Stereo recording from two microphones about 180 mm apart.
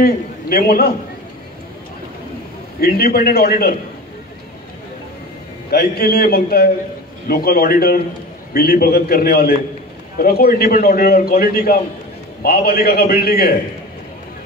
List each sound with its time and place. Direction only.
0.0 s a man's voice: 60° left (ahead or behind)
2.8 s a man's voice: 60° left (ahead or behind)
5.7 s a man's voice: 60° left (ahead or behind)